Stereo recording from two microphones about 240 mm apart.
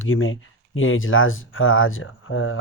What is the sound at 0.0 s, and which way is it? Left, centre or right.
Speech, left.